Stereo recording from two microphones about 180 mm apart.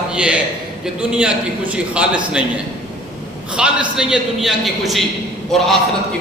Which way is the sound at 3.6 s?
5° right (ahead or behind).